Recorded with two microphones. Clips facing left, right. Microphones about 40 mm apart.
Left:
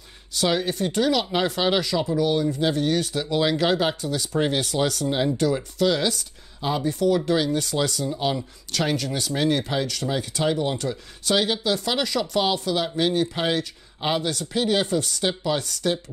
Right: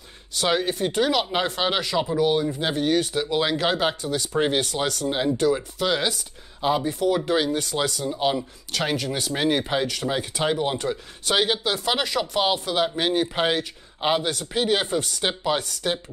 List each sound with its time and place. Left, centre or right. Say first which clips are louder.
0.3 s speech: even; centre